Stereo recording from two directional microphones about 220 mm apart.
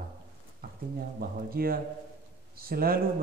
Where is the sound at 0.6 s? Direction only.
45° right (ahead or behind).